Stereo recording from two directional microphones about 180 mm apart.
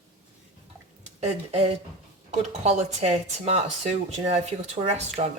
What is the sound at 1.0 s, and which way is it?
Speech, 35° right (ahead or behind).